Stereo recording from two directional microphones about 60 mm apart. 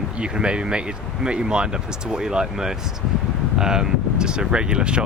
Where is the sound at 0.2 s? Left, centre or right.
Centre.